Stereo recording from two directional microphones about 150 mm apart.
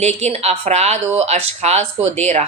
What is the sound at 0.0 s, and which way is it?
A woman's voice, 45° right (ahead or behind).